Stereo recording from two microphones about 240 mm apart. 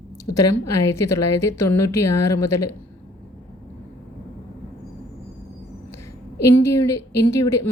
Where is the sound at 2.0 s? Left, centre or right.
Left.